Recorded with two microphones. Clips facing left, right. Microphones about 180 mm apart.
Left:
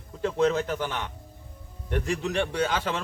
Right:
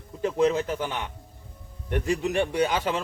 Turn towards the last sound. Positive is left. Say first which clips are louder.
# right 2 dB
turn(degrees=-15)  # may be behind; listen again after turning